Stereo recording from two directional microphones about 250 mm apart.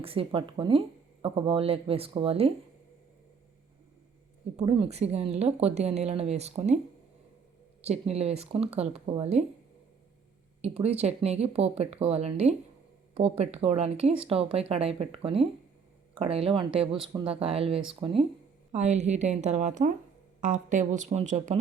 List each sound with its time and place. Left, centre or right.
0.0 s speech: right
4.5 s speech: right
7.8 s speech: right
10.6 s speech: right